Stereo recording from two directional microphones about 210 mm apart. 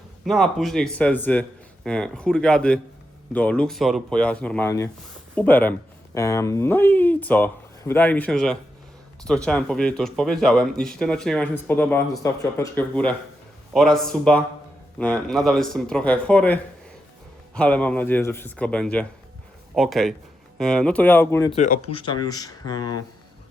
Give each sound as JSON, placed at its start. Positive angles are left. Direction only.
{"t": 0.3, "sound": "speech", "side_deg": 0}
{"t": 21.5, "sound": "speech", "side_deg": 35}